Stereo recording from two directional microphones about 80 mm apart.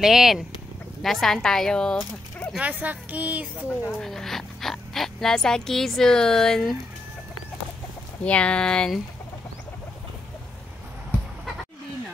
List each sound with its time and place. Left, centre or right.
0.0 s a woman's voice: centre
2.6 s a woman's voice: right
4.0 s speech: centre
8.2 s a woman's voice: centre